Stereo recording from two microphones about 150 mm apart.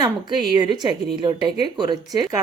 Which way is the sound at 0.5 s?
30° right (ahead or behind).